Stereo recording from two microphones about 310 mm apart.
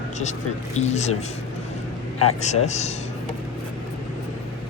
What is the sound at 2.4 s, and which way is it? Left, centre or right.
Speech, left.